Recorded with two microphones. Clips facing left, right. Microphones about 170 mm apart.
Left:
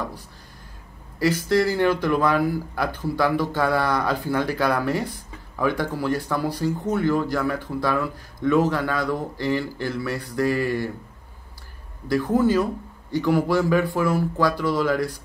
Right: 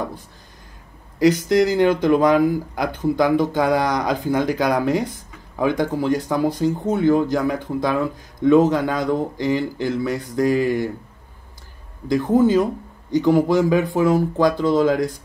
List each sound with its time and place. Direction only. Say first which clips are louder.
1.2 s speech: right 5 dB; 15° right (ahead or behind)
12.1 s speech: right 4 dB; 20° right (ahead or behind)